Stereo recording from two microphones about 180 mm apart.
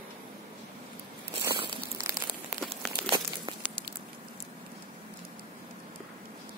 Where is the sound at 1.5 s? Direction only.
30° right (ahead or behind).